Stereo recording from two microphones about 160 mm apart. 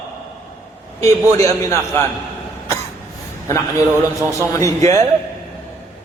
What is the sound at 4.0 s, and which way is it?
Speech, 15° right (ahead or behind).